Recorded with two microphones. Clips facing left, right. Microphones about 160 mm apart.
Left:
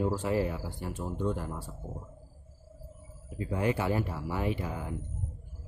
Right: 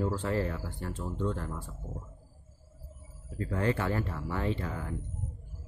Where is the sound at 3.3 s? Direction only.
15° left (ahead or behind).